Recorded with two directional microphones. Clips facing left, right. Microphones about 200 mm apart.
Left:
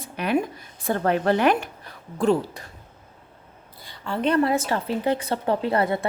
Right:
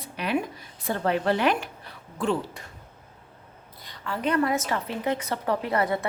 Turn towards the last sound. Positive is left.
turn(degrees=30)  # may be behind; listen again after turning